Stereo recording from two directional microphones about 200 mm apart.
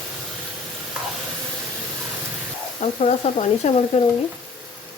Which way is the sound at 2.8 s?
30° left (ahead or behind).